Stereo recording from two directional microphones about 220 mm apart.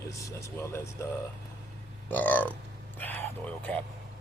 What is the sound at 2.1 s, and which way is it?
Speech, 5° left (ahead or behind).